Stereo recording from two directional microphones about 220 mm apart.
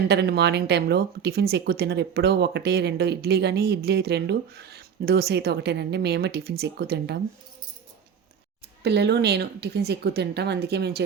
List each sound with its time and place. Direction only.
0.1 s speech: 50° right (ahead or behind)
8.8 s speech: 50° right (ahead or behind)